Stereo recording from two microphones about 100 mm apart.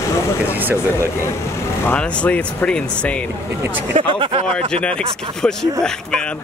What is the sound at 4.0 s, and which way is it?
Speech, 60° right (ahead or behind).